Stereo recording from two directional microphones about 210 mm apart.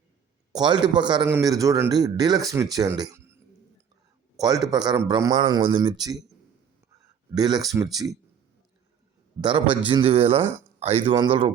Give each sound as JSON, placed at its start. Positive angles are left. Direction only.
{"t": 0.5, "sound": "a man's voice", "side_deg": -20}
{"t": 4.4, "sound": "a man's voice", "side_deg": -20}
{"t": 7.3, "sound": "a man's voice", "side_deg": -20}
{"t": 9.4, "sound": "a man's voice", "side_deg": -25}